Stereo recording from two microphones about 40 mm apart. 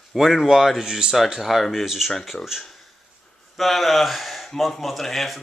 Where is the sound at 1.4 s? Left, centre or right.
Centre.